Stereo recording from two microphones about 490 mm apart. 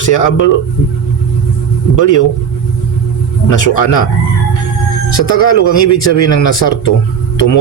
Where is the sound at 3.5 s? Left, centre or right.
Left.